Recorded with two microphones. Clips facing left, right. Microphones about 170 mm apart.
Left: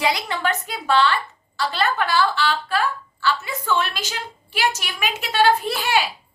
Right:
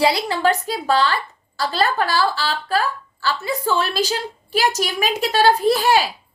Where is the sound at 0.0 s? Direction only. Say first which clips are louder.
Right 5 dB; 35° right (ahead or behind).